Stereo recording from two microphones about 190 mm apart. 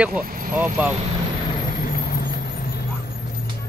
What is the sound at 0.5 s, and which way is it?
Speech, 10° right (ahead or behind).